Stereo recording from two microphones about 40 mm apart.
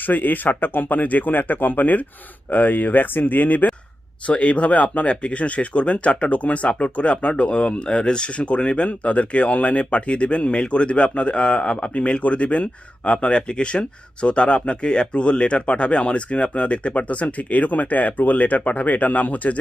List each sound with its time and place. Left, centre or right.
0.0 s speech: left
4.3 s speech: left